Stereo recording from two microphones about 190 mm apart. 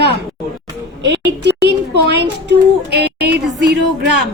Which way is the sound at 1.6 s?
65° right (ahead or behind).